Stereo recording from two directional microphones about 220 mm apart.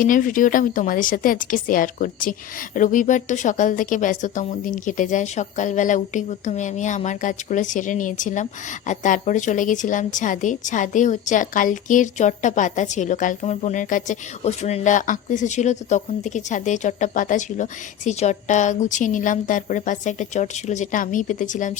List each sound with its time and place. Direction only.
0.0 s a woman's voice: 35° left (ahead or behind)